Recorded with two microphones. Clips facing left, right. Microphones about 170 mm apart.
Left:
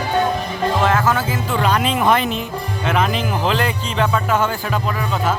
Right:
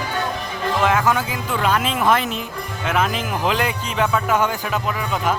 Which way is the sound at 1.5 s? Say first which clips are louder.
Left 2 dB; 5° right (ahead or behind).